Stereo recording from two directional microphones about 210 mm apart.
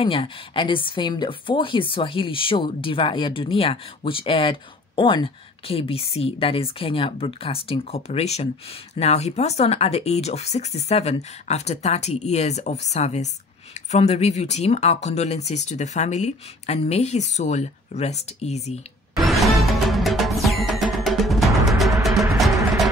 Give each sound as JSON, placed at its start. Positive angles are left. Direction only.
{"t": 0.0, "sound": "speech", "side_deg": 25}
{"t": 19.1, "sound": "music", "side_deg": 0}